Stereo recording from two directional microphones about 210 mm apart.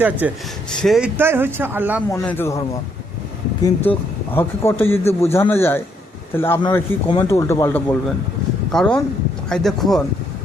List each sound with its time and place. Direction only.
0.0 s speech: 10° right (ahead or behind)
2.0 s a man's voice: 10° left (ahead or behind)
3.9 s a man's voice: 10° left (ahead or behind)